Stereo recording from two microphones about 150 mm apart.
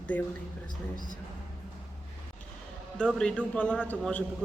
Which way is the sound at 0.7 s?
60° left (ahead or behind).